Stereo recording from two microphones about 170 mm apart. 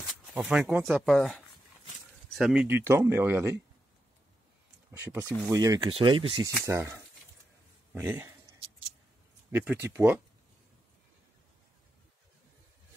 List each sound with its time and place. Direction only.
0.4 s speech: 5° right (ahead or behind)
4.9 s speech: 20° right (ahead or behind)
6.6 s speech: 15° right (ahead or behind)
9.5 s speech: 15° right (ahead or behind)